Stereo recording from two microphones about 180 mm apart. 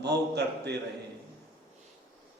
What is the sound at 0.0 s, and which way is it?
Speech, 65° right (ahead or behind).